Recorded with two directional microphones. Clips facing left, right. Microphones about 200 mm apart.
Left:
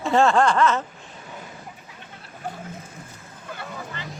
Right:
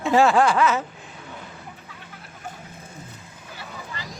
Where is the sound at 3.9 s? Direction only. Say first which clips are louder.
Left 1 dB; 35° right (ahead or behind).